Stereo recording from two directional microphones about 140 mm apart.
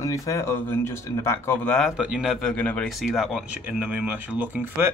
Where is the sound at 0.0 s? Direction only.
20° left (ahead or behind); by 2.5 s 5° right (ahead or behind).